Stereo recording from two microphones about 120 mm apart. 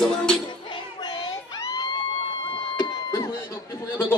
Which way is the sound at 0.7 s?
40° left (ahead or behind).